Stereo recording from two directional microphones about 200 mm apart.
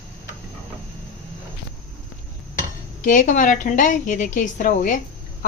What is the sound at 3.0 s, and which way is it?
A woman's voice, 40° left (ahead or behind).